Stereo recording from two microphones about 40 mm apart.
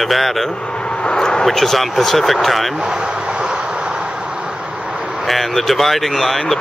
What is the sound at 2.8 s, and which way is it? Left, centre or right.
Vehicle, right.